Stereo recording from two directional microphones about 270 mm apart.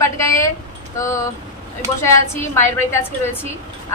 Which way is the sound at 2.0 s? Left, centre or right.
Centre.